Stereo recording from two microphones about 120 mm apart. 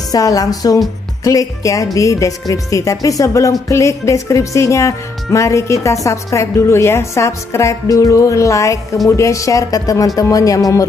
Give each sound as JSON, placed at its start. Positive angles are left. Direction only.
{"t": 0.1, "sound": "a woman's voice", "side_deg": 30}